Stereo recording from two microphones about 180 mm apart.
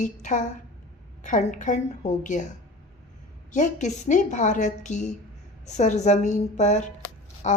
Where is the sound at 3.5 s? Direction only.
45° left (ahead or behind).